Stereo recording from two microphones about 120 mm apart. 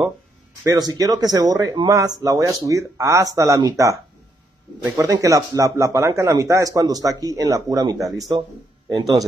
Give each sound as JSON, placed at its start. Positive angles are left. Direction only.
{"t": 0.7, "sound": "speech", "side_deg": -30}